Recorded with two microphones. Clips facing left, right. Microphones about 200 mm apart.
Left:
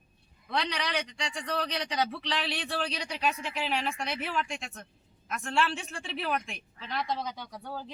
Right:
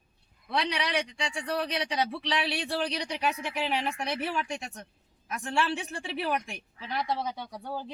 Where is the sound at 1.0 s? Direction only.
Centre (ahead or behind); by 3.9 s 20° right (ahead or behind).